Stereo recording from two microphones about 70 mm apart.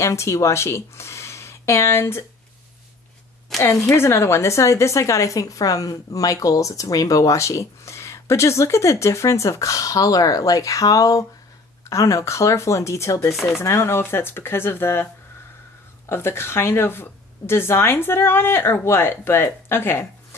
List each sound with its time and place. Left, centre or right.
0.0 s speech: left
3.6 s a woman's voice: left
13.3 s speech: centre
13.6 s a woman's voice: left
16.1 s a woman's voice: left